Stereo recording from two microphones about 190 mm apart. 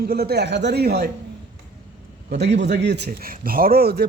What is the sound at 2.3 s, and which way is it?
A man's voice, 65° right (ahead or behind).